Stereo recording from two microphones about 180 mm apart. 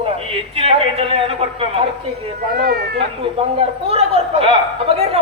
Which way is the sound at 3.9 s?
35° right (ahead or behind).